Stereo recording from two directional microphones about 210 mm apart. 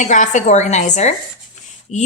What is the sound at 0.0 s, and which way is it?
A woman's voice, 35° left (ahead or behind).